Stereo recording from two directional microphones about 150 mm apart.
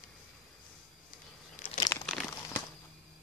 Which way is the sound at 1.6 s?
50° left (ahead or behind).